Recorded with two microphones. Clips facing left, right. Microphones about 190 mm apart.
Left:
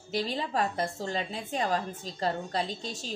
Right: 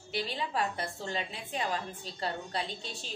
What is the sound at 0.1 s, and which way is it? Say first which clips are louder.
A woman's voice: left 4 dB; 40° left (ahead or behind).